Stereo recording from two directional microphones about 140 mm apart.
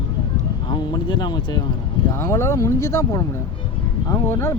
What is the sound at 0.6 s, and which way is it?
Speech, 35° left (ahead or behind).